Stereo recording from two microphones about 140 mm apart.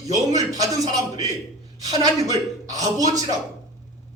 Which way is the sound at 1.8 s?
25° right (ahead or behind).